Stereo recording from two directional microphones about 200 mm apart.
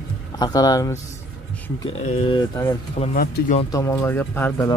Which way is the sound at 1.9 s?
35° left (ahead or behind).